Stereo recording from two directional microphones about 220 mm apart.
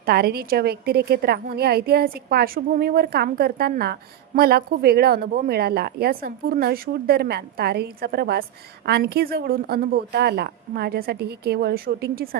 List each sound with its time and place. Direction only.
0.0 s a woman's voice: 45° right (ahead or behind)